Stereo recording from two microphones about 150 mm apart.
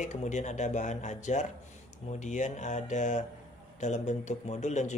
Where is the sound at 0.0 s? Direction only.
55° left (ahead or behind).